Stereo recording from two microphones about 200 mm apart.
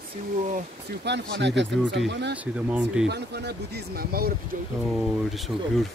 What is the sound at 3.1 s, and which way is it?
Speech, 55° right (ahead or behind).